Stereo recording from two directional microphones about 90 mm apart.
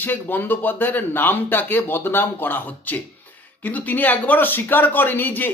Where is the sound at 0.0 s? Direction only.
20° left (ahead or behind).